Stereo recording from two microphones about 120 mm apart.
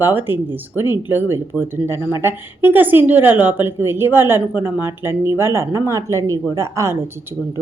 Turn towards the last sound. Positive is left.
turn(degrees=-25)  # may be behind; listen again after turning